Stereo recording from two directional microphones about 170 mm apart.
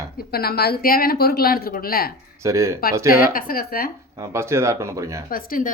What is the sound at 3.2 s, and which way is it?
Speech, 55° left (ahead or behind).